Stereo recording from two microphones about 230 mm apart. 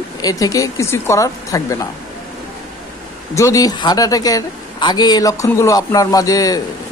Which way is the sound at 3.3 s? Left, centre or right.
Centre.